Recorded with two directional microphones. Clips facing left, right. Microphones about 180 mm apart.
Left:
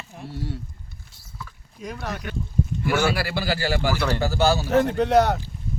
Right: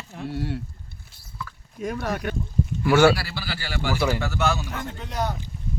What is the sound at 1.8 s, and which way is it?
Speech, 50° right (ahead or behind).